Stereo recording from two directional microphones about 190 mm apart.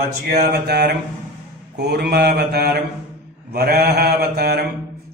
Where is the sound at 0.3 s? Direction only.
60° right (ahead or behind).